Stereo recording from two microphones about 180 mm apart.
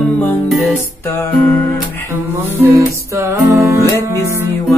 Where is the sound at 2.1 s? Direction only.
15° right (ahead or behind).